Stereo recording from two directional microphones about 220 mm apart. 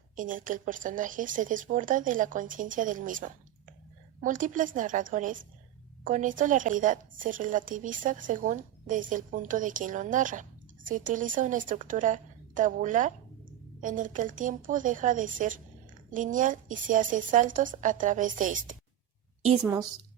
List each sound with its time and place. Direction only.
0.2 s a woman's voice: 35° right (ahead or behind)